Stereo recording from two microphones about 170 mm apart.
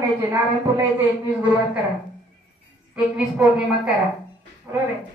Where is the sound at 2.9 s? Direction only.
5° right (ahead or behind).